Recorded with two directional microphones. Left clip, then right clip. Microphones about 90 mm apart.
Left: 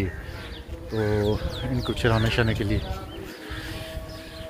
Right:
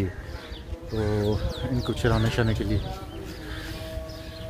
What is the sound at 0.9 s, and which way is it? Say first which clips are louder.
Speech: left 2 dB; 35° right (ahead or behind).